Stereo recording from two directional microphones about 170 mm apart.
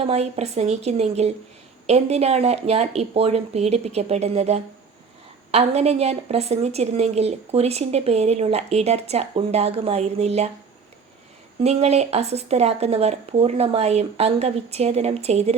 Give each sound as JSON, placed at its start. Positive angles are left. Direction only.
{"t": 0.0, "sound": "a woman's voice", "side_deg": -40}
{"t": 11.6, "sound": "a woman's voice", "side_deg": -40}